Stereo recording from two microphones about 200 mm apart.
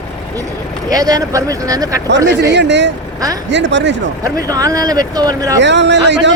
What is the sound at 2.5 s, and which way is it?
Speech, 60° right (ahead or behind).